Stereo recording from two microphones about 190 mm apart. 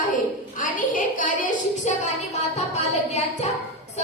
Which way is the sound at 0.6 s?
45° left (ahead or behind).